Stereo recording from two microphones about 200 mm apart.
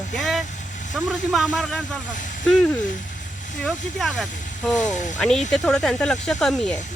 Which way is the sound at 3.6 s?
Centre (ahead or behind).